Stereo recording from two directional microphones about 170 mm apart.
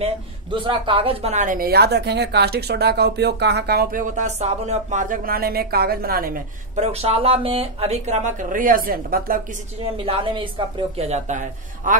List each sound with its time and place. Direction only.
0.0 s speech: 30° right (ahead or behind); by 6.4 s 60° right (ahead or behind)
6.7 s speech: 40° right (ahead or behind); by 9.4 s 60° right (ahead or behind)
10.0 s speech: 35° right (ahead or behind)